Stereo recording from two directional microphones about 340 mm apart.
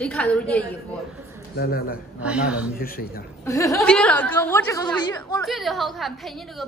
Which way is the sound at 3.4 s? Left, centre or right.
Centre.